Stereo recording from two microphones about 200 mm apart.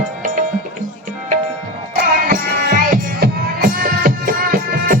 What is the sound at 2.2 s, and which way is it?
Music, 45° right (ahead or behind).